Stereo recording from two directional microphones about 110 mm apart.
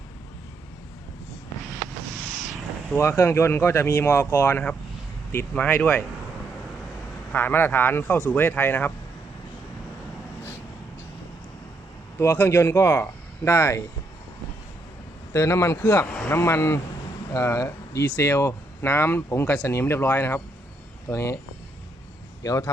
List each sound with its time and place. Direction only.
2.9 s speech: 25° left (ahead or behind)
7.3 s speech: 20° left (ahead or behind)
12.2 s speech: 20° left (ahead or behind)
15.3 s speech: 25° left (ahead or behind)
16.0 s speech: 5° left (ahead or behind)
16.3 s speech: 25° left (ahead or behind)
22.4 s speech: 30° left (ahead or behind)